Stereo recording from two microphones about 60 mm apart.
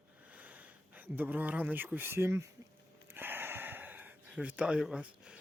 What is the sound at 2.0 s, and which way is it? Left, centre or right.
Speech, right.